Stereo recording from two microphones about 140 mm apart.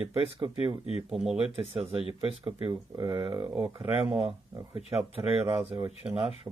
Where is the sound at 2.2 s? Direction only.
35° right (ahead or behind).